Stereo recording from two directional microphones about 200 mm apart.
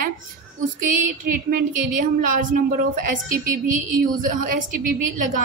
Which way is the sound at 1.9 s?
40° right (ahead or behind).